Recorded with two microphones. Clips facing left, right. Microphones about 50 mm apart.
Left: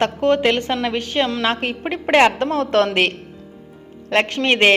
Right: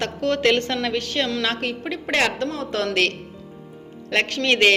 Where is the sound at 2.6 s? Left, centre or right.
Left.